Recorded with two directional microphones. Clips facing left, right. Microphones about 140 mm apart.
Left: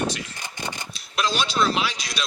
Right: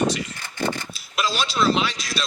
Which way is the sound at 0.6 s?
15° left (ahead or behind).